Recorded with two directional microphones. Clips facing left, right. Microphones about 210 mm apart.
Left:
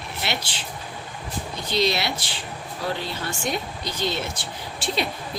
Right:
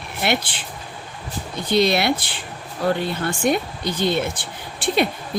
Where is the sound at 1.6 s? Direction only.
55° right (ahead or behind).